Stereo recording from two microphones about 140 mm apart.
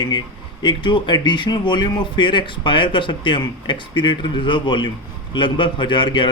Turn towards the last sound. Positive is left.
turn(degrees=35)  # may be behind; listen again after turning